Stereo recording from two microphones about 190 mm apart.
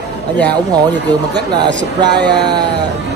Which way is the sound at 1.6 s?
65° right (ahead or behind).